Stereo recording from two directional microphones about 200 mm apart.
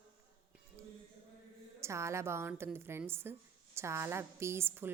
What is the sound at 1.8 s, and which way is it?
A woman's voice, 15° right (ahead or behind).